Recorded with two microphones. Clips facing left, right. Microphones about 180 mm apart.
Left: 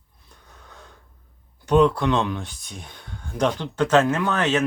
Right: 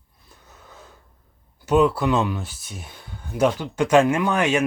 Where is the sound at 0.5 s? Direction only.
5° right (ahead or behind).